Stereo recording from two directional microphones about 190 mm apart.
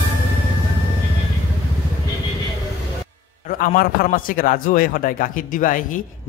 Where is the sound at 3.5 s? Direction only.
50° left (ahead or behind).